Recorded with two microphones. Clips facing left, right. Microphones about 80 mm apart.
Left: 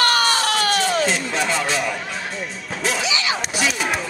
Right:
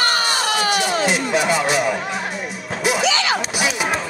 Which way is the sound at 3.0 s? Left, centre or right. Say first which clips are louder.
Right 4 dB; right.